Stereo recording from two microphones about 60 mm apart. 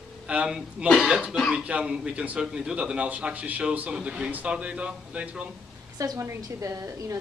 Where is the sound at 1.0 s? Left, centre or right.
Centre.